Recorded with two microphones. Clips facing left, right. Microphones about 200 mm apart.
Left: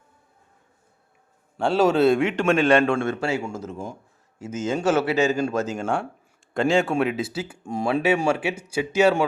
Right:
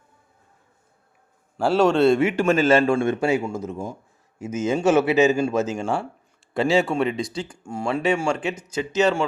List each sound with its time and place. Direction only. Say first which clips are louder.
1.5 s a man's voice: right 1 dB; centre (ahead or behind)
3.0 s a man's voice: right 4 dB; 15° right (ahead or behind); by 9.2 s 10° left (ahead or behind)